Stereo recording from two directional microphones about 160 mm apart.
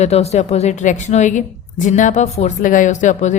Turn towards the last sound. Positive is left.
turn(degrees=50)  # may be behind; listen again after turning